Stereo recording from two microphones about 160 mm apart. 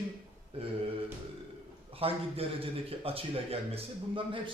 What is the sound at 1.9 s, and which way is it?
A man's voice, 35° right (ahead or behind).